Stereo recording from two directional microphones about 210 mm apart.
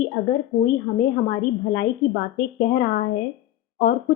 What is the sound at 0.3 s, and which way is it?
A woman's voice, 45° left (ahead or behind).